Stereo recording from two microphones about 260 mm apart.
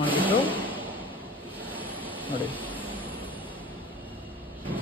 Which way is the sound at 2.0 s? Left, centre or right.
Centre.